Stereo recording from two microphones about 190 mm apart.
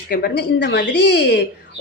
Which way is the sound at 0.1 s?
55° left (ahead or behind).